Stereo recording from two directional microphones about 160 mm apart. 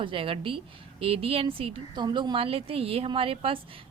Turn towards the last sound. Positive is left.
turn(degrees=-35)  # may be behind; listen again after turning